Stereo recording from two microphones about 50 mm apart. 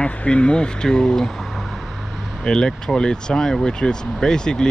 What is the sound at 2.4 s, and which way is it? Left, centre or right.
Speech, centre.